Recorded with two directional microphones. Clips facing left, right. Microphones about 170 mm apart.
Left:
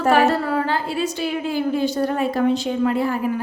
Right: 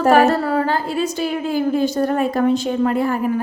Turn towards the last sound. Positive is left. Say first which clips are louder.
# right 2 dB
turn(degrees=-50)  # may be behind; listen again after turning